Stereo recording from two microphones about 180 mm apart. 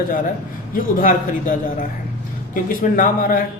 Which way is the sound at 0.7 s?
50° left (ahead or behind).